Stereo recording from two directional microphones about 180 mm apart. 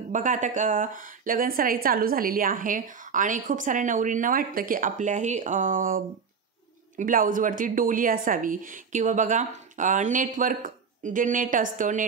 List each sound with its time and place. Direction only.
0.1 s a woman's voice: 45° right (ahead or behind)